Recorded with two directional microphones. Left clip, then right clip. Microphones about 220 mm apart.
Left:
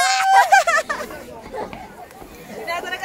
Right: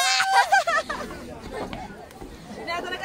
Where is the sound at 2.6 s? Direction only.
10° left (ahead or behind).